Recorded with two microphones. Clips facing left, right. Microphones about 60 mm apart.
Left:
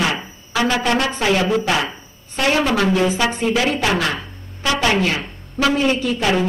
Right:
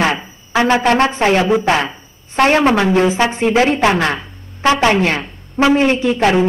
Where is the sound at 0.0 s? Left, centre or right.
Right.